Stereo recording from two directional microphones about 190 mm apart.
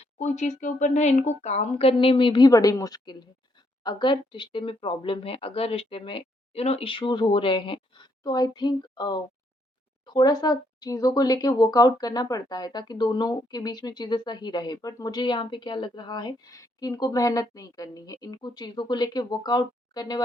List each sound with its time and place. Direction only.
0.0 s speech: 40° left (ahead or behind); by 20.2 s 20° left (ahead or behind)